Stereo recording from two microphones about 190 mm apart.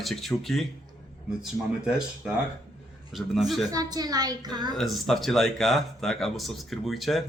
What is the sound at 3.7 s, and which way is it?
A woman's voice, 20° right (ahead or behind).